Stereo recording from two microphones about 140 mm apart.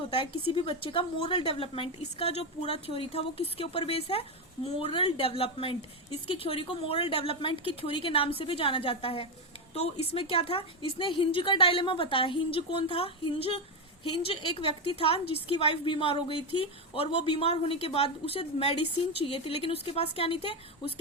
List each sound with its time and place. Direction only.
0.1 s a woman's voice: 40° left (ahead or behind)